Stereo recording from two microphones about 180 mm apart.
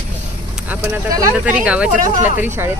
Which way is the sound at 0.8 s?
15° right (ahead or behind).